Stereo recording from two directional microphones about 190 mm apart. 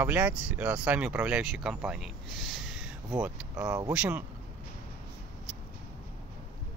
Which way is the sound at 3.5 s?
15° right (ahead or behind).